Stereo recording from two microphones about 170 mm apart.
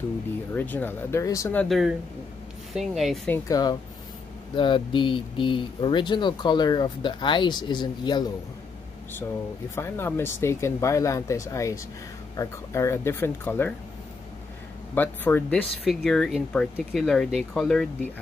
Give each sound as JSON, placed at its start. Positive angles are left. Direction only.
{"t": 0.6, "sound": "speech", "side_deg": 10}
{"t": 1.6, "sound": "speech", "side_deg": 0}
{"t": 3.3, "sound": "speech", "side_deg": 20}
{"t": 9.8, "sound": "speech", "side_deg": 15}
{"t": 15.0, "sound": "speech", "side_deg": 10}